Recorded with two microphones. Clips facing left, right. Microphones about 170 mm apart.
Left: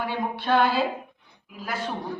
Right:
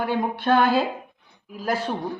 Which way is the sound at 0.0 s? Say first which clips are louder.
Right 4 dB; 50° right (ahead or behind).